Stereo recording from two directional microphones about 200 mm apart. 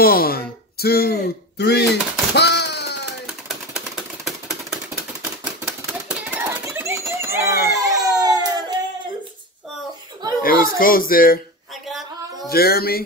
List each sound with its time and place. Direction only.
0.0 s speech: 50° left (ahead or behind)
3.3 s typewriter: centre (ahead or behind)
7.4 s baby cry: 50° left (ahead or behind)
7.7 s baby cry: 15° right (ahead or behind)
10.4 s speech: 45° left (ahead or behind)
12.4 s speech: 50° left (ahead or behind)